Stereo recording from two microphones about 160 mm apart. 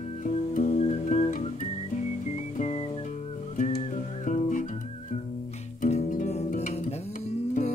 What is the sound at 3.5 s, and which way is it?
Music, 50° left (ahead or behind).